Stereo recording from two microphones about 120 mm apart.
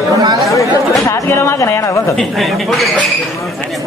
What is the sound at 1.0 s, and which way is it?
Speech, 25° left (ahead or behind).